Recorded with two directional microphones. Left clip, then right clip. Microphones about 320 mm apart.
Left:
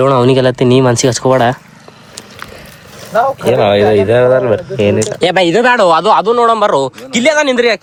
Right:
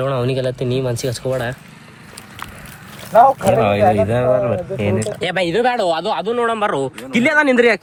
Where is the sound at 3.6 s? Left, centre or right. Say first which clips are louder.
Left 8 dB; left; by 7.8 s centre.